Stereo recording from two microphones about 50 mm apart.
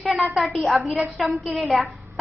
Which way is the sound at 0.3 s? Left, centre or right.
Centre.